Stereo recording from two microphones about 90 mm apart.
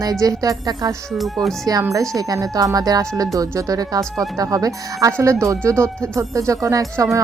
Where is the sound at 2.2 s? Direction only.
40° right (ahead or behind).